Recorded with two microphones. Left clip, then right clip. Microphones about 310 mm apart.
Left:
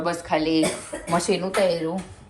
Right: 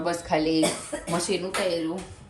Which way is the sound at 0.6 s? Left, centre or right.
Centre.